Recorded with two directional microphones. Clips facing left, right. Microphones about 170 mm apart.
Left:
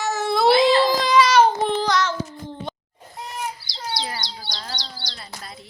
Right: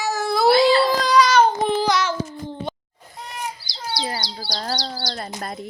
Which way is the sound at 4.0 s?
30° right (ahead or behind).